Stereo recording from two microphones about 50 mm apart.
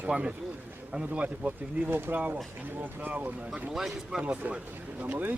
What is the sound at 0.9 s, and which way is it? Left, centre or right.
Speech, right.